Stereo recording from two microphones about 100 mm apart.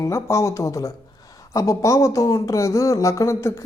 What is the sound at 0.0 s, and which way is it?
Speech, 30° left (ahead or behind).